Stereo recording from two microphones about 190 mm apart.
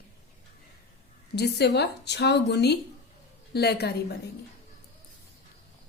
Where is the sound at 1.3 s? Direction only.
60° left (ahead or behind).